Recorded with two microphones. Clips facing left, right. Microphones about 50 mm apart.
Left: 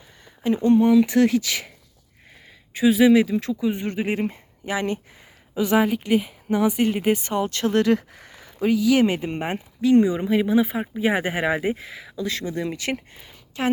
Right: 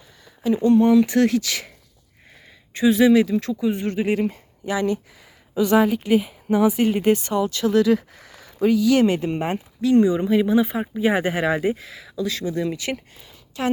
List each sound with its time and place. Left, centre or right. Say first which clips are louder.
0.4 s speech: right 1 dB; left
0.8 s speech: even; centre
2.7 s speech: even; centre; by 5.3 s left
5.5 s speech: right 2 dB; centre
6.0 s speech: right 2 dB; centre
7.1 s speech: right 3 dB; left
7.3 s speech: right 2 dB; left
8.6 s speech: right 2 dB; centre
11.7 s speech: right 1 dB; left